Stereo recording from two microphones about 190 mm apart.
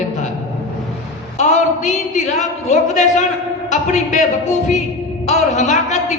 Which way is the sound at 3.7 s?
40° left (ahead or behind).